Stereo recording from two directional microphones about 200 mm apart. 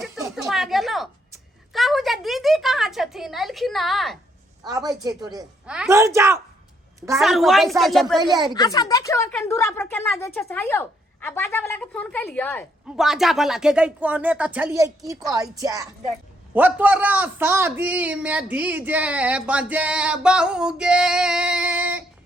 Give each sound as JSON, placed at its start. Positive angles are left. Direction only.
{"t": 0.0, "sound": "a sound", "side_deg": 0}
{"t": 4.6, "sound": "a woman's voice", "side_deg": -20}
{"t": 5.6, "sound": "a man's voice", "side_deg": -5}
{"t": 7.2, "sound": "speech", "side_deg": 0}
{"t": 8.2, "sound": "a woman's voice", "side_deg": -20}
{"t": 8.5, "sound": "a woman's voice", "side_deg": 20}
{"t": 13.0, "sound": "a man's voice", "side_deg": 0}